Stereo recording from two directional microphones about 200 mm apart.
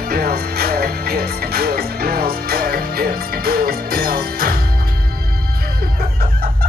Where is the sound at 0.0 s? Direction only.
50° right (ahead or behind).